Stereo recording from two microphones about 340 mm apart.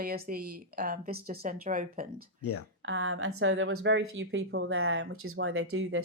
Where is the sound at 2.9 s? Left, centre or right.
Right.